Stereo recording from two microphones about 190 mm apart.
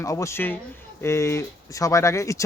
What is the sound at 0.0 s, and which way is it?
Speech, 15° left (ahead or behind).